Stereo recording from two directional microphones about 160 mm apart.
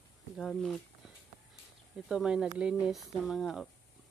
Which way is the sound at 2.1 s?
5° right (ahead or behind).